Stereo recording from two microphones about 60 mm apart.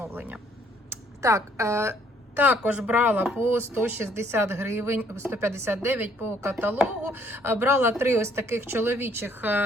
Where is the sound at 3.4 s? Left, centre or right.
Right.